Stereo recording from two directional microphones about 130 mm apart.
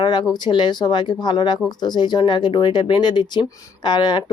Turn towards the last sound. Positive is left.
turn(degrees=35)  # may be behind; listen again after turning